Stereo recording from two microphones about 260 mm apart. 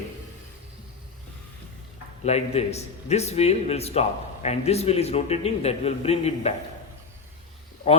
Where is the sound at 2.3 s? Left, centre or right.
Left.